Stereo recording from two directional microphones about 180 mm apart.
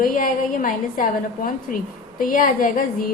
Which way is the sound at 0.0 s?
50° left (ahead or behind).